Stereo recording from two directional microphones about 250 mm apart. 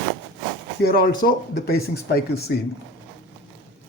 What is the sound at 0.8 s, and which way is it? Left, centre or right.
Speech, left.